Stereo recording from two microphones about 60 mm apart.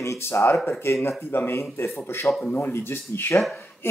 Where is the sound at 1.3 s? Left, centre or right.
Left.